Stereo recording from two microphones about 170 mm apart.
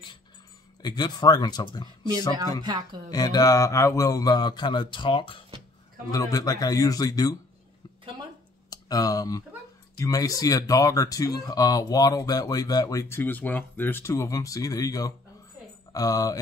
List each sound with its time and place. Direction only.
0.8 s speech: 25° left (ahead or behind)
3.1 s speech: 25° left (ahead or behind)
8.6 s a sound: 20° left (ahead or behind)
9.9 s speech: 20° left (ahead or behind)